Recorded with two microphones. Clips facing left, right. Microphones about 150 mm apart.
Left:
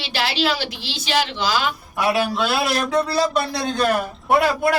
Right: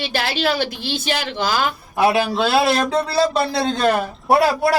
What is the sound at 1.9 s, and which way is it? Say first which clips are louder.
A man's voice: right 4 dB; 30° right (ahead or behind).